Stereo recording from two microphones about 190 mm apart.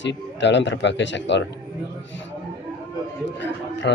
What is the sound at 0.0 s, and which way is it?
A man's voice, 70° left (ahead or behind).